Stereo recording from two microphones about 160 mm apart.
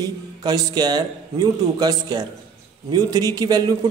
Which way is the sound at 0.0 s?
25° right (ahead or behind).